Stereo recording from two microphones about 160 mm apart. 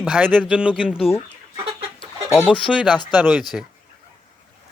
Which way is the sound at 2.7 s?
5° right (ahead or behind).